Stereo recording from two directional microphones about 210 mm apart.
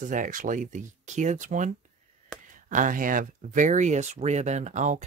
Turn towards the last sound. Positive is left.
turn(degrees=-35)  # may be behind; listen again after turning